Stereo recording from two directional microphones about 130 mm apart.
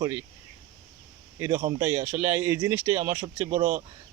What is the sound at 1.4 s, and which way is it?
A man's voice, 20° right (ahead or behind).